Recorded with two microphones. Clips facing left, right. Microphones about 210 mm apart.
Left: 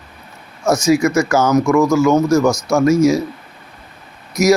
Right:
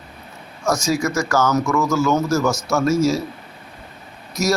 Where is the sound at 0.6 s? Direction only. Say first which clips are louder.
Left 6 dB; 20° left (ahead or behind).